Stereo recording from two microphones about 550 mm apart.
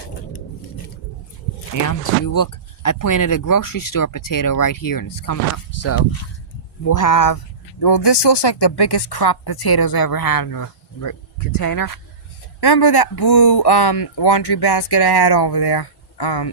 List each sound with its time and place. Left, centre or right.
1.7 s speech: left
6.0 s speech: left
7.8 s speech: left